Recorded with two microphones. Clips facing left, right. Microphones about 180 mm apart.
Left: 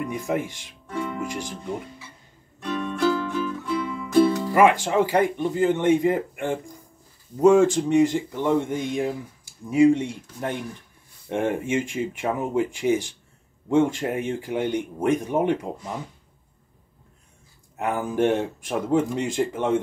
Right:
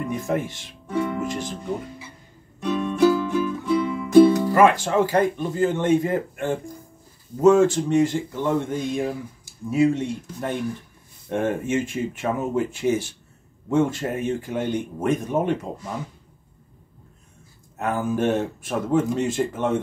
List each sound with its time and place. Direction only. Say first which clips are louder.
0.1 s speech: right 1 dB; 15° left (ahead or behind)
2.6 s music: right 5 dB; 20° right (ahead or behind)
4.6 s speech: left 1 dB; 15° left (ahead or behind)
17.7 s speech: even; 15° left (ahead or behind)